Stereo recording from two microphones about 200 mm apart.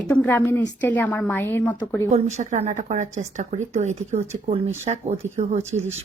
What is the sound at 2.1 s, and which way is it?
Speech, 35° right (ahead or behind).